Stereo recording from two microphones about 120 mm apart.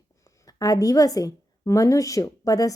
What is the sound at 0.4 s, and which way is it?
A woman's voice, 30° left (ahead or behind).